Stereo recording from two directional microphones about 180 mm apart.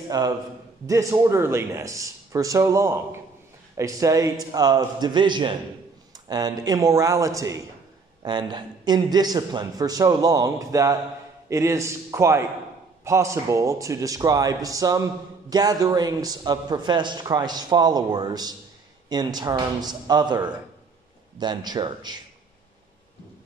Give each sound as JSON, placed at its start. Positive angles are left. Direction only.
{"t": 0.1, "sound": "a man's voice", "side_deg": -20}